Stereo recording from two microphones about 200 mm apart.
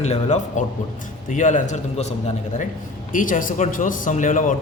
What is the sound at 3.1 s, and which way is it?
A man's voice, 45° left (ahead or behind).